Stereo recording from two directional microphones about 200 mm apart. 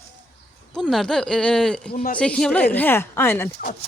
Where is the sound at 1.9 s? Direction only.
45° left (ahead or behind).